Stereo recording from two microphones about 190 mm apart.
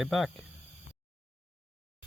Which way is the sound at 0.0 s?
Centre (ahead or behind).